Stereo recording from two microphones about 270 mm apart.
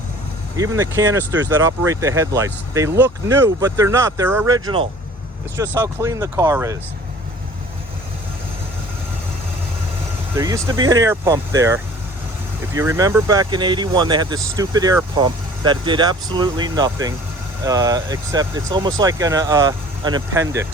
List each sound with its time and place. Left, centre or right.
0.8 s speech: centre
10.3 s speech: centre